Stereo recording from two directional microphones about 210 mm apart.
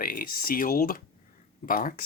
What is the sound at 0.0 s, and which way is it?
Speech, 45° left (ahead or behind).